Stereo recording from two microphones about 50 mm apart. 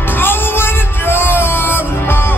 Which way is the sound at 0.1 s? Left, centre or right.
Left.